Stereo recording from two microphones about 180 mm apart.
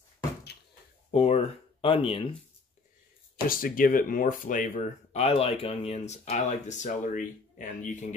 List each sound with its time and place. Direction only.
1.1 s speech: 35° left (ahead or behind)
3.4 s speech: 50° left (ahead or behind)
5.1 s speech: 35° left (ahead or behind)